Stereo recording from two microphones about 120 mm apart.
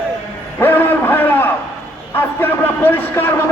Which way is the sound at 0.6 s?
15° left (ahead or behind).